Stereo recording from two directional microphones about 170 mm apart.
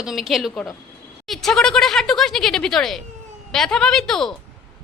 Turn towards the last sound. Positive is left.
turn(degrees=5)  # may be behind; listen again after turning